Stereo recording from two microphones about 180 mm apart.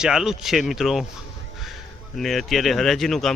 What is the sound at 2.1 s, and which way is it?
Speech, centre (ahead or behind).